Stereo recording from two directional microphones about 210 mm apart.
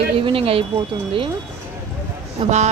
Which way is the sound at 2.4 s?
30° right (ahead or behind).